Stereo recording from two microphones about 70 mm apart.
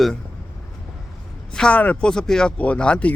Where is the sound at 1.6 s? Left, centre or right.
Centre.